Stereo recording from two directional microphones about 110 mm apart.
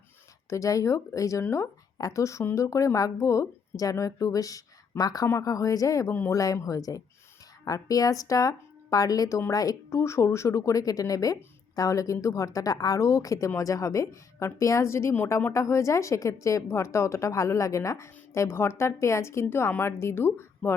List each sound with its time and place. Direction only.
0.5 s a woman's voice: 30° left (ahead or behind)